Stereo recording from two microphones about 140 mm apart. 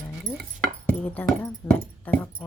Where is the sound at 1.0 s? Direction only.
10° left (ahead or behind).